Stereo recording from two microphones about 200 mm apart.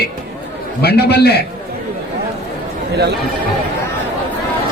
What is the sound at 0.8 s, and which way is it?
Speech, 55° left (ahead or behind).